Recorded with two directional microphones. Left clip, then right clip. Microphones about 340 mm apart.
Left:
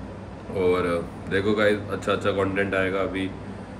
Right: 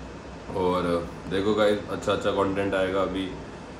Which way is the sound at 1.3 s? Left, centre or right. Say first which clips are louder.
Left 1 dB; centre.